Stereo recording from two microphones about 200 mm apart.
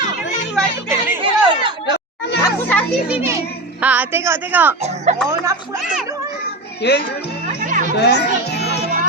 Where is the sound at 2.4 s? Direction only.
10° left (ahead or behind).